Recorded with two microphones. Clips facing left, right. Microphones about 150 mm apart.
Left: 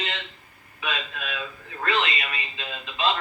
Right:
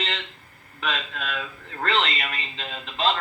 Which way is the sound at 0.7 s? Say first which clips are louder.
Right 2 dB; 65° right (ahead or behind).